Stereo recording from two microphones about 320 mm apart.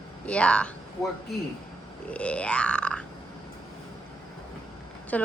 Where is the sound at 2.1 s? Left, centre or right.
Centre.